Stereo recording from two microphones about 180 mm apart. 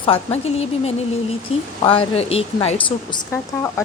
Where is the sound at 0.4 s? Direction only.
35° left (ahead or behind).